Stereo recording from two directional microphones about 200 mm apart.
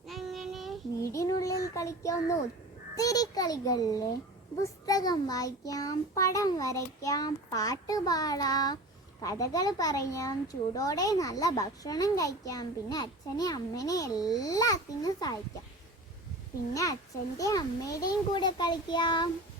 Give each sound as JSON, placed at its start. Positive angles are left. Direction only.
{"t": 0.1, "sound": "child singing", "side_deg": 0}
{"t": 1.0, "sound": "child singing", "side_deg": 15}
{"t": 2.9, "sound": "a child's voice", "side_deg": 20}
{"t": 16.7, "sound": "a child's voice", "side_deg": 15}